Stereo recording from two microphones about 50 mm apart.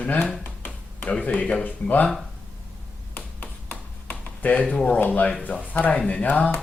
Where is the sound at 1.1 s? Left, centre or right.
Left.